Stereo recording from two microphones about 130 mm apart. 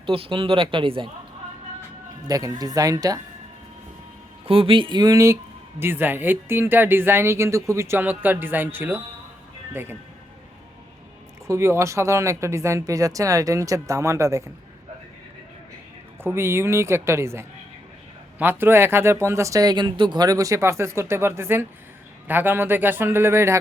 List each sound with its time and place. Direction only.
0.0 s speech: 45° right (ahead or behind)
2.2 s speech: 30° right (ahead or behind)
4.4 s speech: 45° right (ahead or behind); by 10.0 s 15° right (ahead or behind)
11.4 s speech: 20° right (ahead or behind)
16.2 s speech: 20° right (ahead or behind)